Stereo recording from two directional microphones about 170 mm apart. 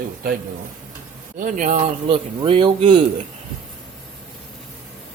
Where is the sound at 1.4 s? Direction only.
50° right (ahead or behind).